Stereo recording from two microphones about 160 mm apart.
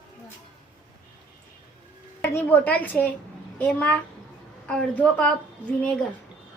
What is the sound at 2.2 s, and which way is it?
A woman's voice, 15° left (ahead or behind).